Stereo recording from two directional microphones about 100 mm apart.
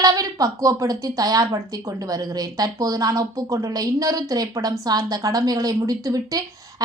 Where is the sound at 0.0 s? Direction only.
40° right (ahead or behind).